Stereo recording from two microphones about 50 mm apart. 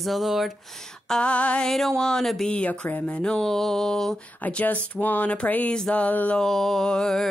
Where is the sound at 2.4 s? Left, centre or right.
Left.